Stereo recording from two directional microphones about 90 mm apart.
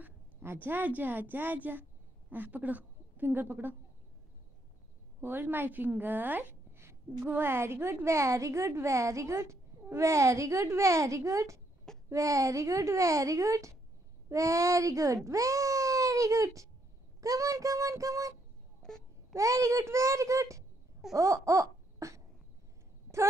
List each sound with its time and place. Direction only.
0.0 s a woman's voice: 25° right (ahead or behind)
5.2 s a woman's voice: 20° right (ahead or behind); by 18.3 s 40° right (ahead or behind)
18.8 s babbling: 5° left (ahead or behind)
19.3 s a woman's voice: 35° right (ahead or behind)
21.1 s laughter: 35° right (ahead or behind)